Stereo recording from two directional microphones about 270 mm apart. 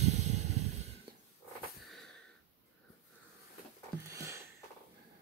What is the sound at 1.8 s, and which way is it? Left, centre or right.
Wheeze, centre.